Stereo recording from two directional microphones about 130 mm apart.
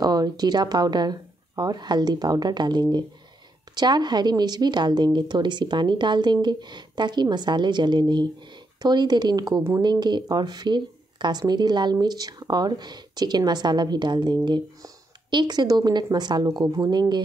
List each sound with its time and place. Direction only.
0.0 s speech: 30° right (ahead or behind)